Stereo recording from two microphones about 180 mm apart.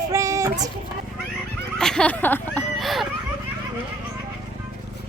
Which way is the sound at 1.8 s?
5° left (ahead or behind).